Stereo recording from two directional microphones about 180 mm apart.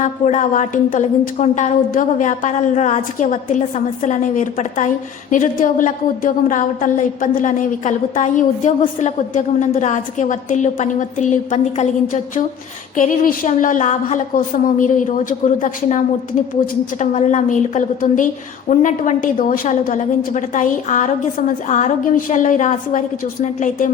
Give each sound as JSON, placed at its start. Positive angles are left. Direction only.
{"t": 0.0, "sound": "a woman's voice", "side_deg": 40}